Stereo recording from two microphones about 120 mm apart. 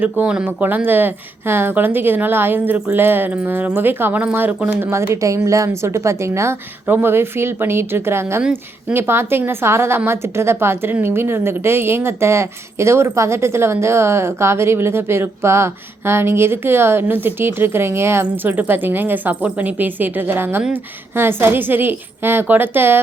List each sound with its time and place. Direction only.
0.0 s a woman's voice: 10° right (ahead or behind)